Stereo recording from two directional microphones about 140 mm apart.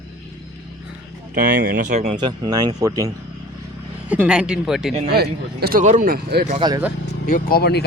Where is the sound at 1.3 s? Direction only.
80° right.